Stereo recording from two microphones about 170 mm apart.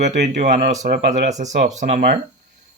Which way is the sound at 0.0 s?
45° right (ahead or behind).